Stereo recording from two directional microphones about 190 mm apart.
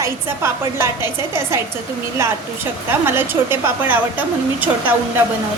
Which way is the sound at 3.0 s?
10° right (ahead or behind).